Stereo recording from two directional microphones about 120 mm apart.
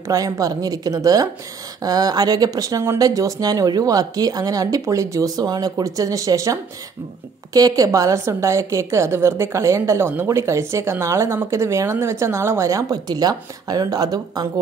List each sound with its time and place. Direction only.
0.1 s a woman's voice: 30° right (ahead or behind)